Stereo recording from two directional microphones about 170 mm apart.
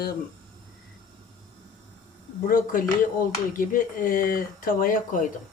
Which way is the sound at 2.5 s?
55° left (ahead or behind).